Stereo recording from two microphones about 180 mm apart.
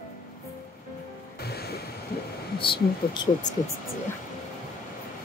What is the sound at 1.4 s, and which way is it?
Music, 60° left (ahead or behind).